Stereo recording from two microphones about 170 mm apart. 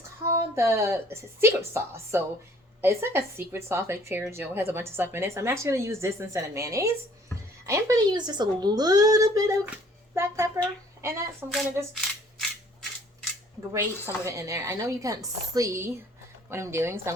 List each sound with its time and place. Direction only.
0.5 s a woman's voice: 15° right (ahead or behind)
11.4 s speech: centre (ahead or behind)
13.7 s a woman's voice: 15° right (ahead or behind)